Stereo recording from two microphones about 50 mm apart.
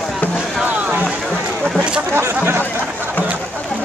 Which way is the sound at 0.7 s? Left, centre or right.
Right.